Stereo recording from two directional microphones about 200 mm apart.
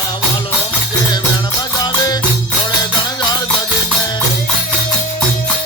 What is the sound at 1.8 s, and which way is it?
Music, 20° left (ahead or behind).